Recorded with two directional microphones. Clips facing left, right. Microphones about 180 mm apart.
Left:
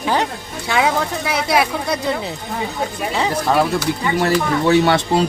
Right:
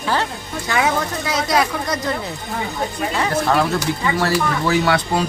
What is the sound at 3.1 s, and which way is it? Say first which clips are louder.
Speech: left 1 dB; 15° left (ahead or behind).